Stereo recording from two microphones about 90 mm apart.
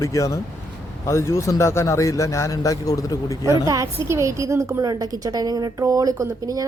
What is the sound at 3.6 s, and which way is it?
A woman's voice, 40° right (ahead or behind).